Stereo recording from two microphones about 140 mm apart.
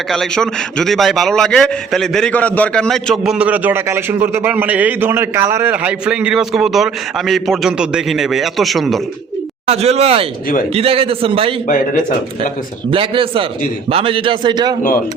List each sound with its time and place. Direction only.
0.1 s a man's voice: 5° left (ahead or behind)
9.6 s a man's voice: 45° right (ahead or behind)
12.9 s a man's voice: 40° right (ahead or behind)